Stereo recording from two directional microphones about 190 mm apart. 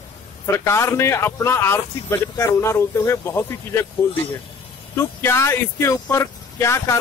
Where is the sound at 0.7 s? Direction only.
15° left (ahead or behind).